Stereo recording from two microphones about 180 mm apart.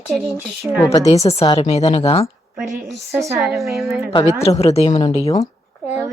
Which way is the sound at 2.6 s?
Centre (ahead or behind).